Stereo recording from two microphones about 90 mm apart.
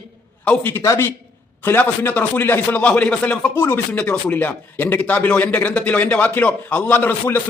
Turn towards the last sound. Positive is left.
turn(degrees=20)  # may be behind; listen again after turning